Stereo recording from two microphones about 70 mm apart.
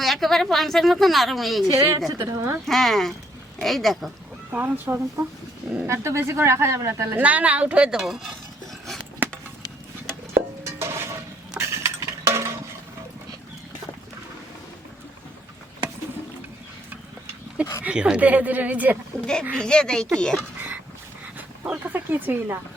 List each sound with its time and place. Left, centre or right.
0.0 s a woman's voice: centre
1.7 s speech: right
2.6 s a woman's voice: centre
4.5 s speech: right
5.8 s speech: right
7.2 s speech: right
7.9 s a woman's voice: centre
9.2 s a sound: right
10.7 s a sound: right
17.8 s speech: centre
19.2 s speech: centre
21.7 s speech: right